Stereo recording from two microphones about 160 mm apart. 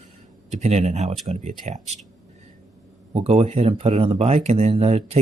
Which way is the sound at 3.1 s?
40° right (ahead or behind).